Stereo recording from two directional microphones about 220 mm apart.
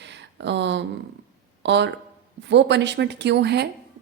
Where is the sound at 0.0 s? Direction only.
50° right (ahead or behind).